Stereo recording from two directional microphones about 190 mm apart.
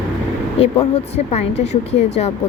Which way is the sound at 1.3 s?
35° left (ahead or behind).